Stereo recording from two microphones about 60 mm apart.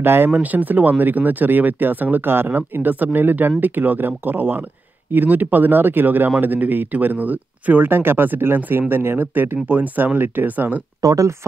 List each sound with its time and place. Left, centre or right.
0.0 s speech: right
0.3 s speech: right
11.0 s speech: right